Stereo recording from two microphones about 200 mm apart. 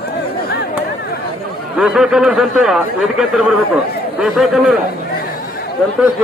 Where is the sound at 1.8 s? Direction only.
5° right (ahead or behind).